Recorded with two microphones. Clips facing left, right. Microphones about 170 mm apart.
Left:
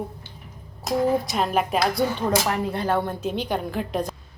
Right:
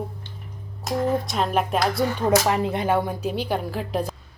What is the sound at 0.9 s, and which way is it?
Speech, centre (ahead or behind).